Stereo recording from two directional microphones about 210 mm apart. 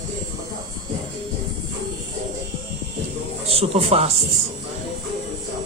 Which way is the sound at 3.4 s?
30° right (ahead or behind).